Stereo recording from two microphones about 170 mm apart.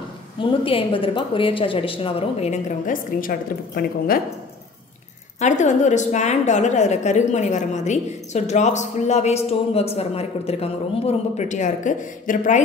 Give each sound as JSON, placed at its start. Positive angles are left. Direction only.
{"t": 0.4, "sound": "speech", "side_deg": 30}
{"t": 2.9, "sound": "a woman's voice", "side_deg": 55}
{"t": 5.4, "sound": "a woman's voice", "side_deg": 45}